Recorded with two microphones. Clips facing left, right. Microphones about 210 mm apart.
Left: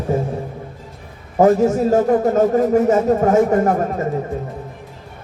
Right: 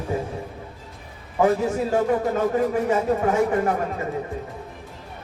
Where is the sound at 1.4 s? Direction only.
40° left (ahead or behind).